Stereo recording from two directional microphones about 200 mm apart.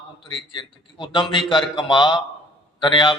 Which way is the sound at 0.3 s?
25° left (ahead or behind).